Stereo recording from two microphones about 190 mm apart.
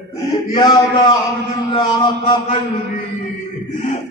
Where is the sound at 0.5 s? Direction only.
25° left (ahead or behind).